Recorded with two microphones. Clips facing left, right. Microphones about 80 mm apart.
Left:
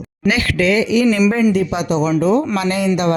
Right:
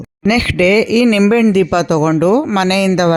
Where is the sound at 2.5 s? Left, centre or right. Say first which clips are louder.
Right 5 dB; right.